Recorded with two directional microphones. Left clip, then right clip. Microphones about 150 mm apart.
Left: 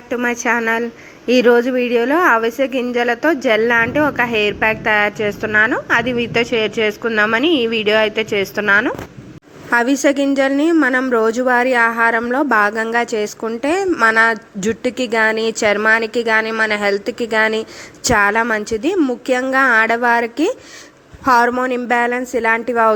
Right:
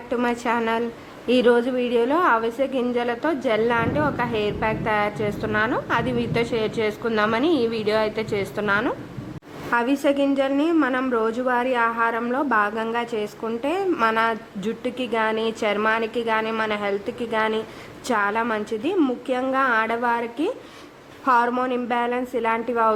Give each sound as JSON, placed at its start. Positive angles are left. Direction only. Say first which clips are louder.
{"t": 0.1, "sound": "a woman's voice", "louder": "left 6 dB", "side_deg": 20}